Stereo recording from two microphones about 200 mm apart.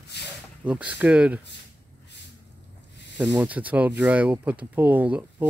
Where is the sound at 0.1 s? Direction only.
55° left (ahead or behind).